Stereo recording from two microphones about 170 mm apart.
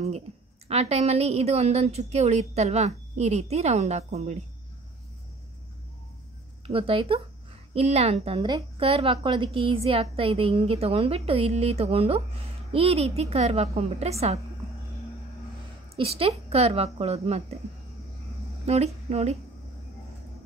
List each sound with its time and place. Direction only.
0.7 s a woman's voice: 40° right (ahead or behind)
6.6 s a woman's voice: 30° right (ahead or behind)
16.0 s a woman's voice: 35° right (ahead or behind)
18.7 s a woman's voice: 40° right (ahead or behind)